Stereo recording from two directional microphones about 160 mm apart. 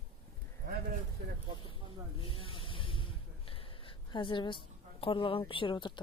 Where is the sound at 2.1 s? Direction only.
35° left (ahead or behind).